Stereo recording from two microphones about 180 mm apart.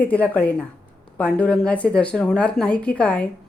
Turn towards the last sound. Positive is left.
turn(degrees=5)  # may be behind; listen again after turning